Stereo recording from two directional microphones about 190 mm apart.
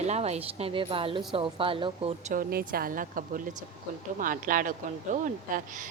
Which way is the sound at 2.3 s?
50° right (ahead or behind).